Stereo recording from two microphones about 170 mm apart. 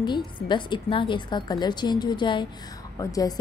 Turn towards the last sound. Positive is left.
turn(degrees=20)  # may be behind; listen again after turning